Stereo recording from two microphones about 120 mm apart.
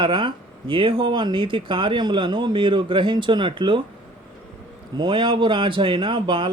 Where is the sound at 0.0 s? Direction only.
40° right (ahead or behind).